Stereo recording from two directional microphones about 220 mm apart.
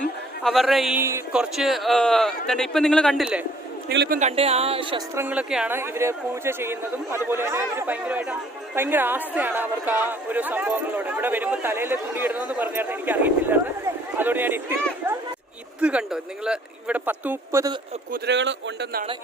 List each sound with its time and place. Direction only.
0.0 s a man's voice: centre (ahead or behind)
3.8 s speech: 45° right (ahead or behind)
4.2 s speech: 30° right (ahead or behind)
5.1 s speech: 10° right (ahead or behind)
15.8 s a man's voice: 5° right (ahead or behind)
18.1 s speech: 50° right (ahead or behind)